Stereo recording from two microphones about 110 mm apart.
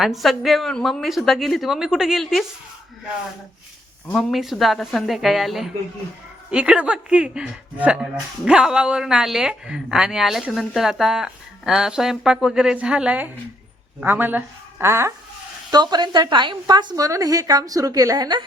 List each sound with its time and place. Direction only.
0.0 s speech: centre (ahead or behind)
4.1 s a woman's voice: centre (ahead or behind); by 15.1 s 25° right (ahead or behind)
15.7 s a woman's voice: 40° right (ahead or behind)